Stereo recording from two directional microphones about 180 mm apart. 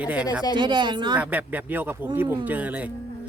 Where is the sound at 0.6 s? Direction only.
25° right (ahead or behind).